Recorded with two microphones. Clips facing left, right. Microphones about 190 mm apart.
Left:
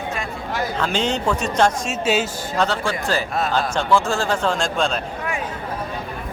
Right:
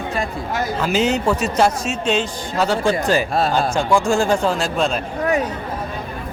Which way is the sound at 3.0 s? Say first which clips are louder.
Right 4 dB; 15° right (ahead or behind).